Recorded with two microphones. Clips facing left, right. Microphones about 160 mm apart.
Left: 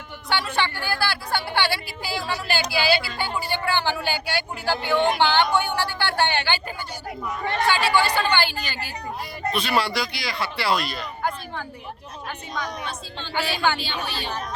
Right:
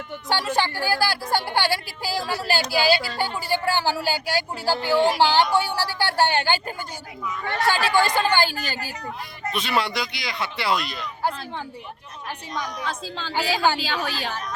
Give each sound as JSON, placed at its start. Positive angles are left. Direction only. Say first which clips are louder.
{"t": 0.3, "sound": "speech", "louder": "right 1 dB", "side_deg": -40}
{"t": 7.7, "sound": "speech", "louder": "right 1 dB", "side_deg": -45}
{"t": 9.5, "sound": "speech", "louder": "left 1 dB", "side_deg": -20}
{"t": 11.2, "sound": "speech", "louder": "right 2 dB", "side_deg": -30}
{"t": 12.8, "sound": "speech", "louder": "right 3 dB", "side_deg": -90}